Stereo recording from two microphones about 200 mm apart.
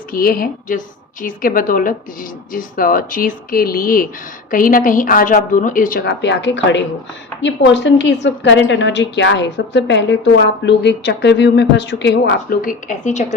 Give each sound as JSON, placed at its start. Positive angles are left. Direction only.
{"t": 0.1, "sound": "a woman's voice", "side_deg": 45}